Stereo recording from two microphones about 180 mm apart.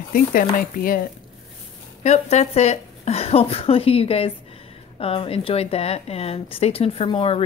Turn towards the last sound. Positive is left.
turn(degrees=30)  # may be behind; listen again after turning